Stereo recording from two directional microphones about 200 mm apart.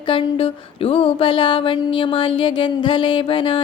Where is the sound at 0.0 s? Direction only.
25° left (ahead or behind).